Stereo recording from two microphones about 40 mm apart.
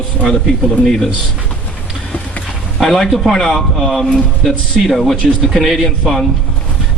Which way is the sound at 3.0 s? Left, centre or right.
Centre.